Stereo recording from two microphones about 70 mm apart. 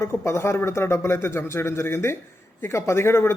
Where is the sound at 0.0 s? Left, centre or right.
Left.